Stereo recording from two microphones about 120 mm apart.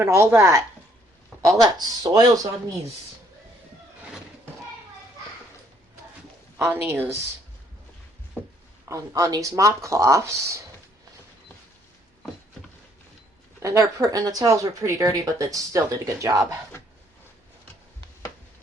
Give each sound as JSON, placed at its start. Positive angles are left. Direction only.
{"t": 0.0, "sound": "speech", "side_deg": -20}
{"t": 1.6, "sound": "speech", "side_deg": -35}
{"t": 6.6, "sound": "speech", "side_deg": -20}
{"t": 8.4, "sound": "a sound", "side_deg": 15}
{"t": 8.9, "sound": "speech", "side_deg": -25}
{"t": 13.6, "sound": "speech", "side_deg": -25}